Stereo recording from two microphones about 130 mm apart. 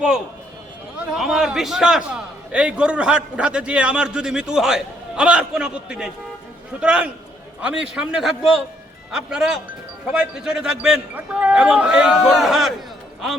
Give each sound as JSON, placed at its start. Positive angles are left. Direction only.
{"t": 0.9, "sound": "a man's voice", "side_deg": -5}